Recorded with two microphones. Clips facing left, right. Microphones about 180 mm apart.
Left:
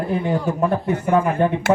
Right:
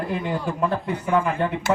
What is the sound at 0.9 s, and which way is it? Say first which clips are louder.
Speech: left 4 dB; 45° left (ahead or behind).